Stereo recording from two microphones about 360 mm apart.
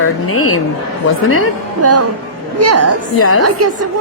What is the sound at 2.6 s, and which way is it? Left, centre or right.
Speech, right.